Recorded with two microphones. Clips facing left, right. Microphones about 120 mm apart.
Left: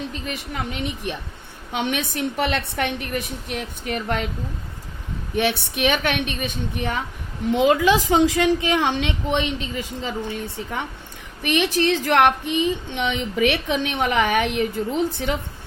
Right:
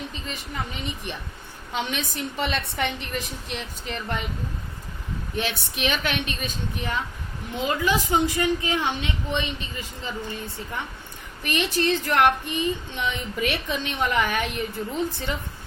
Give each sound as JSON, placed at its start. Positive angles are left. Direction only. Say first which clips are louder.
{"t": 0.1, "sound": "a woman's voice", "louder": "left 4 dB", "side_deg": 70}
{"t": 1.7, "sound": "a woman's voice", "louder": "left 4 dB", "side_deg": 65}
{"t": 5.4, "sound": "a woman's voice", "louder": "left 7 dB", "side_deg": 65}
{"t": 7.5, "sound": "a woman's voice", "louder": "left 7 dB", "side_deg": 90}
{"t": 11.4, "sound": "a woman's voice", "louder": "left 4 dB", "side_deg": 70}